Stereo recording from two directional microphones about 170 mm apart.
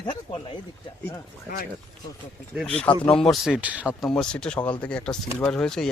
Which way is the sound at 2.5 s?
5° left (ahead or behind).